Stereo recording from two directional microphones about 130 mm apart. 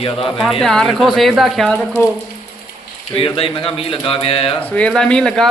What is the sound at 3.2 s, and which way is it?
Speech, 45° left (ahead or behind).